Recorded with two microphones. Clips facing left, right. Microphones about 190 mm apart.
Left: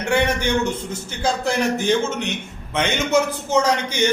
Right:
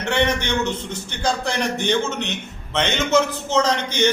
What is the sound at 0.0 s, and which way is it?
A man's voice, 10° left (ahead or behind).